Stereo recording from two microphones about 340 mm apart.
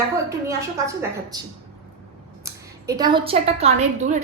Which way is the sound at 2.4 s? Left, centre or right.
Centre.